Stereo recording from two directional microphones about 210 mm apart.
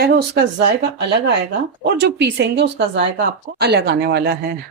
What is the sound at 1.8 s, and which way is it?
A woman's voice, 50° right (ahead or behind).